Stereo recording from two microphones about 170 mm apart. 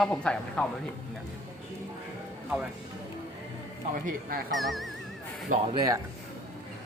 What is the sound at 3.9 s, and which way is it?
Speech, 55° right (ahead or behind).